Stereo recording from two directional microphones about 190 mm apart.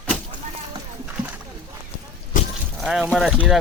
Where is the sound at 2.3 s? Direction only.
45° left (ahead or behind).